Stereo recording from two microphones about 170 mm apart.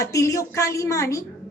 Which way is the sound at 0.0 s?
20° left (ahead or behind).